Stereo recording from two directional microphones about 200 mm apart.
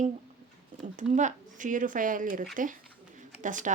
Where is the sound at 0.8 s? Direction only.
35° right (ahead or behind).